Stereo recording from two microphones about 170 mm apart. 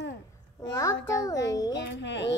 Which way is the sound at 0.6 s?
15° left (ahead or behind).